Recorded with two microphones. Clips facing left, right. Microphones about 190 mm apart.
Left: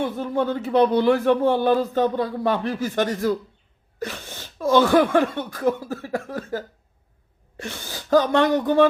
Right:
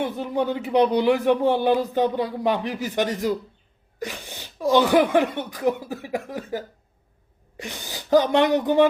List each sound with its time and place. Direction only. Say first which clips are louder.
0.0 s speech: left 1 dB; 15° right (ahead or behind)